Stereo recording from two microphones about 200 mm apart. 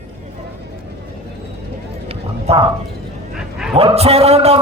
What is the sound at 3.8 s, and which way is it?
Speech, 30° right (ahead or behind).